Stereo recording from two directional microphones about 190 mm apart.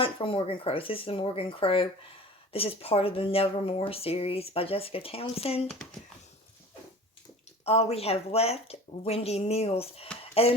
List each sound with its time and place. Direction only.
0.0 s speech: 25° left (ahead or behind)
7.6 s speech: 35° left (ahead or behind)